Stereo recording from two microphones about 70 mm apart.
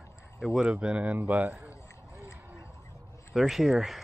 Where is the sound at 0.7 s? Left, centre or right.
Centre.